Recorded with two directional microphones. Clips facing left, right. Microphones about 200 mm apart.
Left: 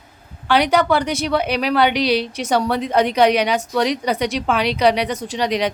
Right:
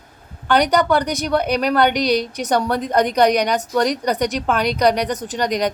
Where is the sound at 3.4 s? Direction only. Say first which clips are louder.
Even; 5° left (ahead or behind).